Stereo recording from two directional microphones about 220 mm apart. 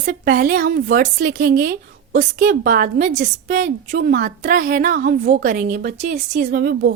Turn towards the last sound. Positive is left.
turn(degrees=-45)  # may be behind; listen again after turning